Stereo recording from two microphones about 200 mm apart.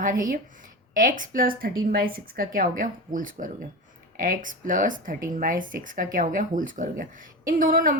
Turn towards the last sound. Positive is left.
turn(degrees=-45)  # may be behind; listen again after turning